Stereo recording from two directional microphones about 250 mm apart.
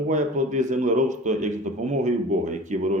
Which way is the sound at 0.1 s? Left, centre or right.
Right.